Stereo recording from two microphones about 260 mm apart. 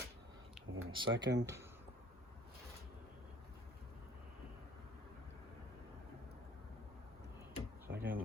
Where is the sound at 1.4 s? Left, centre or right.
Centre.